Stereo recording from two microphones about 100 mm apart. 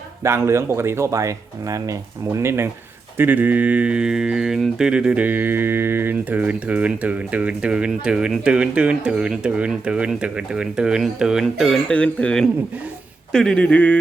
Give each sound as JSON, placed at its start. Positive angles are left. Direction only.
{"t": 0.2, "sound": "speech", "side_deg": -30}